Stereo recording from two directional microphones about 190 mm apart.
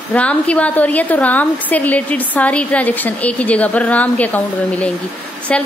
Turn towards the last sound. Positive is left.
turn(degrees=5)  # may be behind; listen again after turning